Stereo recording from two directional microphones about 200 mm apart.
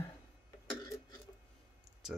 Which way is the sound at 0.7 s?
15° left (ahead or behind).